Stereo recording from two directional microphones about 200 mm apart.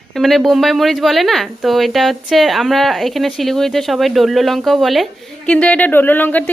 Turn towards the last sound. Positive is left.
turn(degrees=10)  # may be behind; listen again after turning